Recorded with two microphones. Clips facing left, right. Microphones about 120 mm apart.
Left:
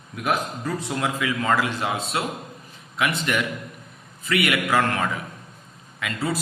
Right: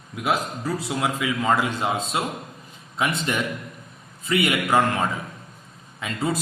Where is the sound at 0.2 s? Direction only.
10° right (ahead or behind).